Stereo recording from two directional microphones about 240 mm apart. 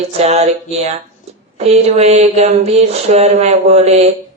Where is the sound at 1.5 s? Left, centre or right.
Right.